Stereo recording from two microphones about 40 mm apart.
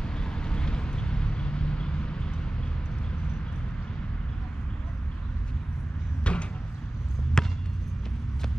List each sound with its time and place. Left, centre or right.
0.0 s vehicle: left
6.3 s a sound: left
7.4 s basketball bounce: centre